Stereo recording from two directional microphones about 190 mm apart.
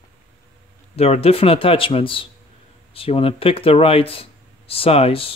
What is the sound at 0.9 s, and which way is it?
Speech, 35° left (ahead or behind).